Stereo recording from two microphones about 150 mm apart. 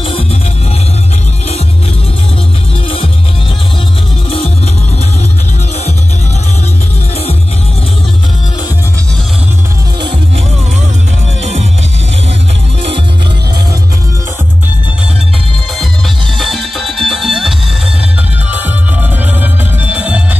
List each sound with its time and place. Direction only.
0.0 s music: 35° left (ahead or behind)
16.3 s music: centre (ahead or behind)
19.4 s music: 10° right (ahead or behind)